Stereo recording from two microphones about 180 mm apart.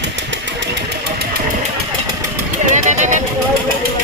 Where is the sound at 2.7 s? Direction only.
45° right (ahead or behind).